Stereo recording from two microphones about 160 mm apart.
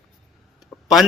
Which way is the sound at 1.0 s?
Centre (ahead or behind).